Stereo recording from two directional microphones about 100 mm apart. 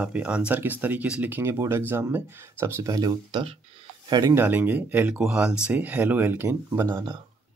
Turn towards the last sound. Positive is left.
turn(degrees=-25)  # may be behind; listen again after turning